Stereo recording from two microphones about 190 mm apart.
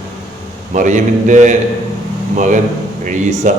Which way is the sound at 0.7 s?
40° right (ahead or behind).